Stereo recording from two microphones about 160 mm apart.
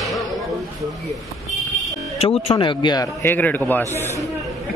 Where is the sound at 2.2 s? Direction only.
35° left (ahead or behind).